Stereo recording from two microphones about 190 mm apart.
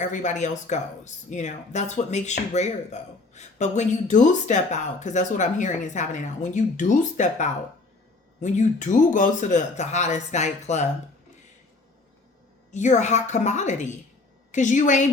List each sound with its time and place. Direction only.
0.0 s speech: 40° left (ahead or behind)
12.7 s speech: 40° left (ahead or behind)